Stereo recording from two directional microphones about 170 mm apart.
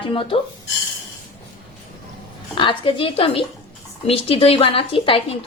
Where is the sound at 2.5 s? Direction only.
30° left (ahead or behind).